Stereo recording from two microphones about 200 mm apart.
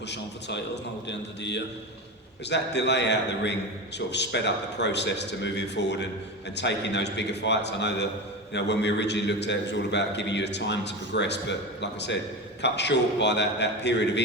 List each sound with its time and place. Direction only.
0.1 s a man's voice: 60° left (ahead or behind)